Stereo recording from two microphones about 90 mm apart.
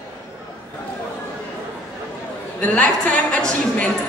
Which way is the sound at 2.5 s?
15° left (ahead or behind).